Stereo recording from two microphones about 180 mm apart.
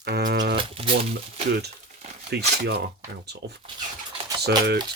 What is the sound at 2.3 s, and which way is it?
Speech, 65° right (ahead or behind).